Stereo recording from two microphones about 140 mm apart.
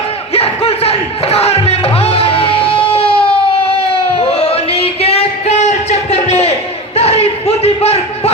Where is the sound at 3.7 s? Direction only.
45° left (ahead or behind).